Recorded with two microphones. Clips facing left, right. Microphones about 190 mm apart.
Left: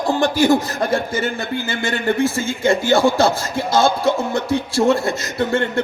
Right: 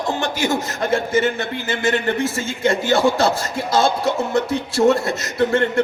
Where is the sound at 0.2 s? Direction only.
35° left (ahead or behind).